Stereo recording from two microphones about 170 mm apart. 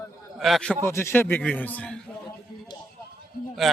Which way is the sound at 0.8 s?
15° left (ahead or behind).